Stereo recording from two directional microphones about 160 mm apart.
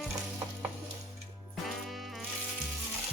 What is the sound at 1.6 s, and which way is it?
Music, centre (ahead or behind).